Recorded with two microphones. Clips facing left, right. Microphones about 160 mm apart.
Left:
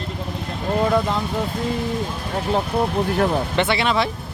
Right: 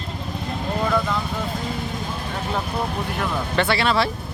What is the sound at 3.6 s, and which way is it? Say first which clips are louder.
Speech: right 2 dB; 20° left (ahead or behind).